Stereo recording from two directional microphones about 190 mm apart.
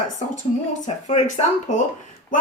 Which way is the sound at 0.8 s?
40° left (ahead or behind).